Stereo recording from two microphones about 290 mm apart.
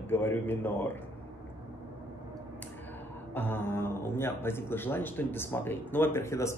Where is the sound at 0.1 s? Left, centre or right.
Centre.